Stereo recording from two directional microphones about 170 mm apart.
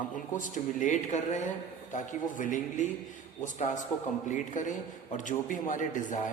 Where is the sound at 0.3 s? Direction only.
50° left (ahead or behind).